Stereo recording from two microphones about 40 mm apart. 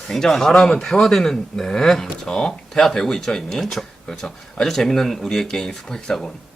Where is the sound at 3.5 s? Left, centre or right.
Centre.